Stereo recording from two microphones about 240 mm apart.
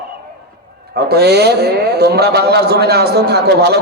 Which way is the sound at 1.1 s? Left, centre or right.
Right.